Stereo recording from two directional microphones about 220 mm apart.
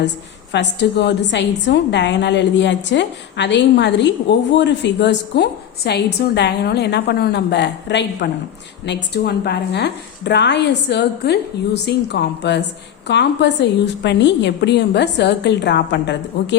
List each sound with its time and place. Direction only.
0.5 s a woman's voice: 50° left (ahead or behind)